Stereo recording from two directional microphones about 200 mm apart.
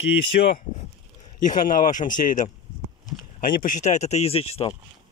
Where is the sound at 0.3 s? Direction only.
45° left (ahead or behind); by 4.7 s 30° left (ahead or behind).